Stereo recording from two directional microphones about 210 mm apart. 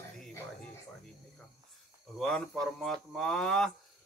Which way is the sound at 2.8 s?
Centre (ahead or behind).